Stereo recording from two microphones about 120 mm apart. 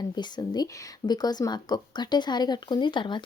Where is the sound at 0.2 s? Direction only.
35° left (ahead or behind).